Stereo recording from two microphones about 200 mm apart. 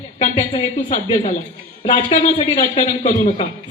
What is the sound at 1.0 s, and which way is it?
A man's voice, 30° left (ahead or behind).